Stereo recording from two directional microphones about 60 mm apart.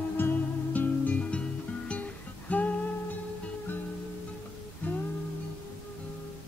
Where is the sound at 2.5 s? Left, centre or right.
Left.